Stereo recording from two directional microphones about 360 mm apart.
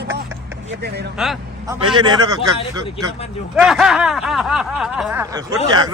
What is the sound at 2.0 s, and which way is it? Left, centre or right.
Speech, centre.